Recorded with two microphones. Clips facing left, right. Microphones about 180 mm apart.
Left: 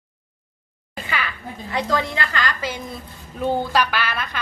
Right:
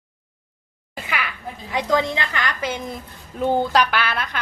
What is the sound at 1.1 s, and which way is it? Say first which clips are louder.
A woman's voice: even; 10° right (ahead or behind).